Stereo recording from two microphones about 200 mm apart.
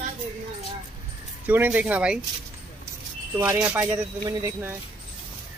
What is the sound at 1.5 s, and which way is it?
Speech, 10° right (ahead or behind).